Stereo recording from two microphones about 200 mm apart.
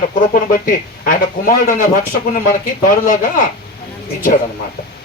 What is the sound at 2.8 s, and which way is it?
Speech, 45° left (ahead or behind).